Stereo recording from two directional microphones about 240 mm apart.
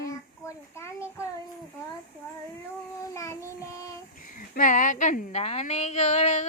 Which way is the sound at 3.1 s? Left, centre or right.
Centre.